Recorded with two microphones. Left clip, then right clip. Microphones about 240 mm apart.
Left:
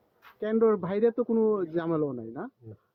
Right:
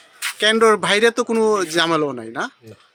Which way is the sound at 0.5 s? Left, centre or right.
Centre.